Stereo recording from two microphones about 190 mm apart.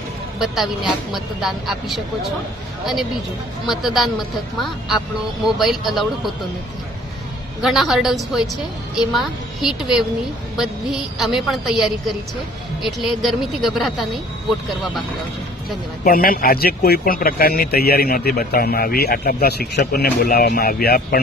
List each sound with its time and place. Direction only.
1.1 s a woman's voice: centre (ahead or behind)
3.6 s a woman's voice: centre (ahead or behind)
7.6 s a woman's voice: centre (ahead or behind)
16.0 s speech: 50° left (ahead or behind)